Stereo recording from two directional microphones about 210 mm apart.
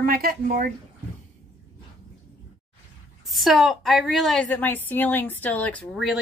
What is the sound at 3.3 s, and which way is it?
A woman's voice, centre (ahead or behind).